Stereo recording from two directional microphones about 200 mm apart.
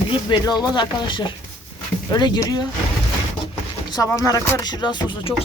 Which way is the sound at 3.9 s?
15° left (ahead or behind).